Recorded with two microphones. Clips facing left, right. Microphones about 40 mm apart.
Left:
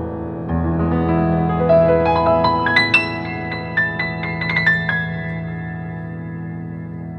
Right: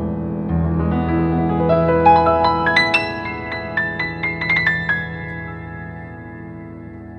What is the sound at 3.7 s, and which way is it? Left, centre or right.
Music, left.